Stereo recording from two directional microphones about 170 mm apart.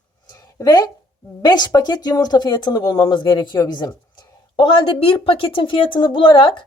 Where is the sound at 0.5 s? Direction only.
20° left (ahead or behind).